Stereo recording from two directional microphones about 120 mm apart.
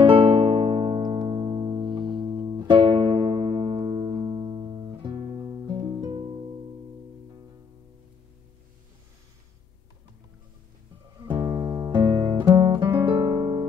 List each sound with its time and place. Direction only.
0.1 s music: 40° right (ahead or behind)
11.1 s music: 40° right (ahead or behind)
12.5 s guitar: 45° right (ahead or behind)
13.3 s music: 35° right (ahead or behind)